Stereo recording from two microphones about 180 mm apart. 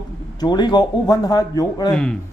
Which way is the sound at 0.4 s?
25° left (ahead or behind).